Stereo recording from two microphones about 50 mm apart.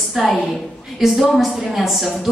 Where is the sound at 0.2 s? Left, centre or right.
Centre.